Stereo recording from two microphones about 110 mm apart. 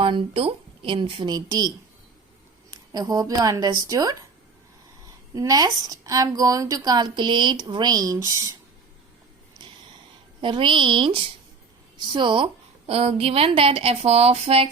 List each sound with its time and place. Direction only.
0.0 s a woman's voice: 55° right (ahead or behind); by 4.2 s 35° right (ahead or behind)
5.3 s a woman's voice: 35° right (ahead or behind)
10.4 s a woman's voice: 50° right (ahead or behind)
12.9 s speech: 65° right (ahead or behind)